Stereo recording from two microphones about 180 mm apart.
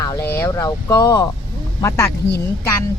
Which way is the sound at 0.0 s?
20° left (ahead or behind).